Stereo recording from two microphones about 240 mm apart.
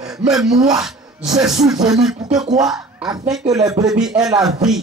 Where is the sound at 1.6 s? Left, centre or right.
Centre.